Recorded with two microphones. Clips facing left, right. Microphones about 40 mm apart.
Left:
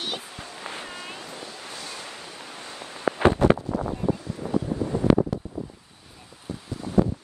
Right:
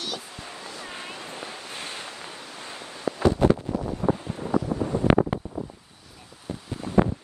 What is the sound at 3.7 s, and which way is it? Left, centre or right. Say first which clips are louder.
Wind noise: left 1 dB; left.